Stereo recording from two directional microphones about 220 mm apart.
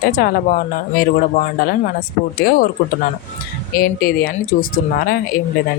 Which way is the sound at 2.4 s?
40° left (ahead or behind).